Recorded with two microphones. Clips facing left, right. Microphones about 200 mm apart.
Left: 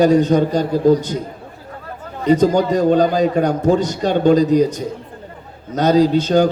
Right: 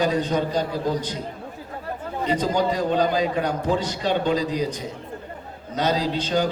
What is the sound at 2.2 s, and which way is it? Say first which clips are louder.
A man's voice: left 9 dB; 45° left (ahead or behind).